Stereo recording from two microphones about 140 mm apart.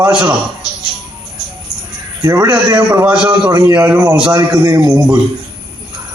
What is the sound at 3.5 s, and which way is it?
A man's voice, 25° right (ahead or behind).